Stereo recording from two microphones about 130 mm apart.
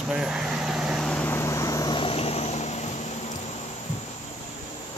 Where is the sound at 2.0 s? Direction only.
45° left (ahead or behind).